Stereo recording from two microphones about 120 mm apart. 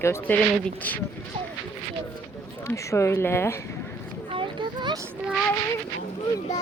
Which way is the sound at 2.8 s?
25° left (ahead or behind).